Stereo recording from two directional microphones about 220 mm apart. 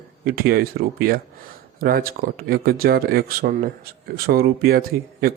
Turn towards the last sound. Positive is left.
turn(degrees=-45)  # may be behind; listen again after turning